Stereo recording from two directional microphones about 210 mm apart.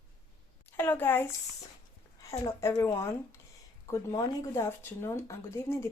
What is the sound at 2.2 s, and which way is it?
Speech, 15° left (ahead or behind).